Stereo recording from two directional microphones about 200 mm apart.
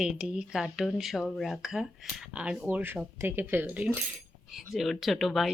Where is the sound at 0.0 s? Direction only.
5° right (ahead or behind).